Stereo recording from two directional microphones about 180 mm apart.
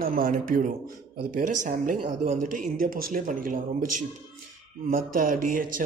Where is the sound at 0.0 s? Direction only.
50° right (ahead or behind).